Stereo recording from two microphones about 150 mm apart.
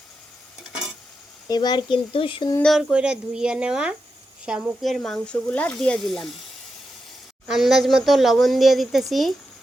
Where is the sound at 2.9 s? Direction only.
5° right (ahead or behind).